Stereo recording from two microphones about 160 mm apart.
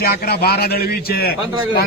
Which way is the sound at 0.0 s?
75° left (ahead or behind).